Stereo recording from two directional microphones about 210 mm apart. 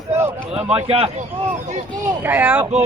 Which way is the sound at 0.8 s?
25° right (ahead or behind).